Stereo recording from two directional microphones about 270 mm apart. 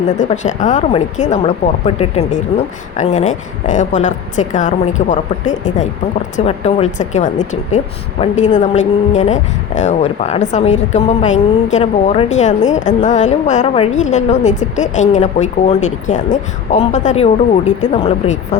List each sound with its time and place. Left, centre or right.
0.2 s a woman's voice: left